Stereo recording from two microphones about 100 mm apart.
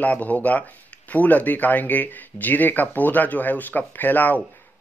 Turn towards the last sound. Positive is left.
turn(degrees=20)  # may be behind; listen again after turning